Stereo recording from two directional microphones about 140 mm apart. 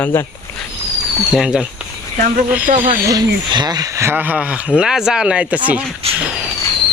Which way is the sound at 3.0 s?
25° right (ahead or behind).